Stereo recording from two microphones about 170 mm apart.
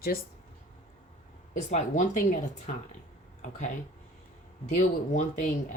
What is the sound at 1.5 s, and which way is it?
Speech, 45° left (ahead or behind).